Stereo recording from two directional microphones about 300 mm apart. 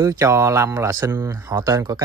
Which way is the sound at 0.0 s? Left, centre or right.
Centre.